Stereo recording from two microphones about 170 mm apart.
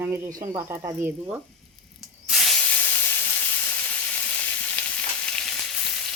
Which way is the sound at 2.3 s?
Centre (ahead or behind).